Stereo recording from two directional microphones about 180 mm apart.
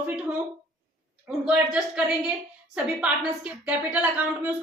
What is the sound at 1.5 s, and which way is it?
A woman's voice, 5° right (ahead or behind).